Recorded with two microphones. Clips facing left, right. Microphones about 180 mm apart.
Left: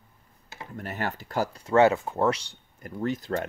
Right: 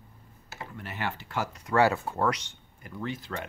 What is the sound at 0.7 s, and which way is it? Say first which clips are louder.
Speech: left 3 dB; 40° left (ahead or behind).